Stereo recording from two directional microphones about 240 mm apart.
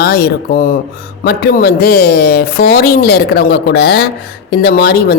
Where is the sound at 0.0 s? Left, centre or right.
Left.